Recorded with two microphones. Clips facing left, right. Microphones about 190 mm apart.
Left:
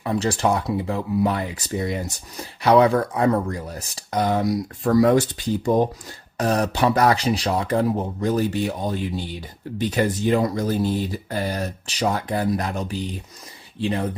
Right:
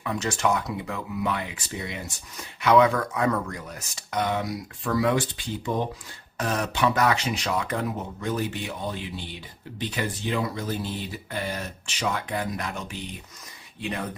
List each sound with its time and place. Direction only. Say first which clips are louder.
0.0 s speech: left 5 dB; 35° left (ahead or behind)